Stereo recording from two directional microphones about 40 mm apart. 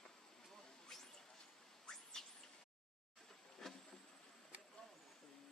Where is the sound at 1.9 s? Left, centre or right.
Centre.